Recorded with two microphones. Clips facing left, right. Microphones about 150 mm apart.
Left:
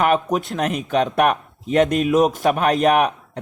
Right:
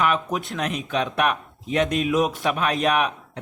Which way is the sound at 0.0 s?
45° left (ahead or behind).